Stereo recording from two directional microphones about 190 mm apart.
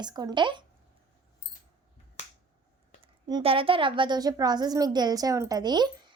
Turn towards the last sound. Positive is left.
turn(degrees=-20)  # may be behind; listen again after turning